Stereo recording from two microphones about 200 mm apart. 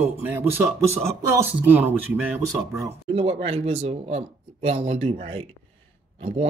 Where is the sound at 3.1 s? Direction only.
30° right (ahead or behind).